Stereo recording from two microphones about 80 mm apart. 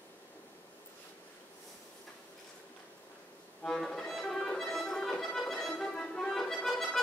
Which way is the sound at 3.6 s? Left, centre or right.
Centre.